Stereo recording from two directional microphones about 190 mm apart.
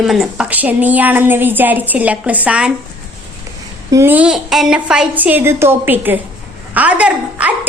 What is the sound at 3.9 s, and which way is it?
A woman's voice, 10° right (ahead or behind).